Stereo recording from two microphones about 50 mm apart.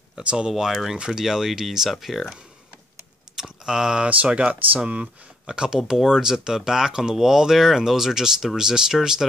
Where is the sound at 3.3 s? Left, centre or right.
Centre.